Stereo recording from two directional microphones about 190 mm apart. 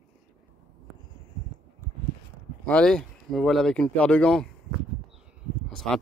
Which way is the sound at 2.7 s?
5° left (ahead or behind).